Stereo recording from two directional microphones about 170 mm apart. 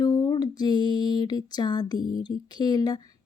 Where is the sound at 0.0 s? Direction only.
25° left (ahead or behind).